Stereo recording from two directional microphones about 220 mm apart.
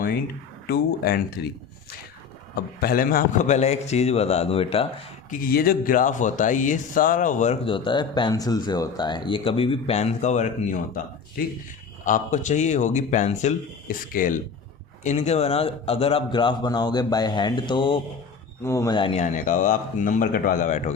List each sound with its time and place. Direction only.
0.7 s speech: 45° left (ahead or behind)
2.6 s speech: 40° left (ahead or behind); by 4.9 s 25° left (ahead or behind)
5.3 s a man's voice: 40° left (ahead or behind)